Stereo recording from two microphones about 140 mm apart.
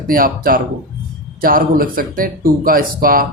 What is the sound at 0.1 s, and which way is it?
Speech, 85° right.